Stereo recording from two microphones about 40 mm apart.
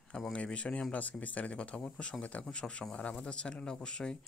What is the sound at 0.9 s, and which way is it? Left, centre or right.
Speech, left.